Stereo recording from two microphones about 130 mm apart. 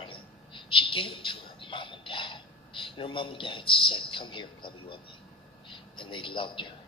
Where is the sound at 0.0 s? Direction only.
40° left (ahead or behind).